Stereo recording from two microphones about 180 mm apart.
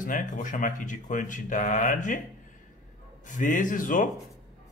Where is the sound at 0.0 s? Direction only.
45° left (ahead or behind).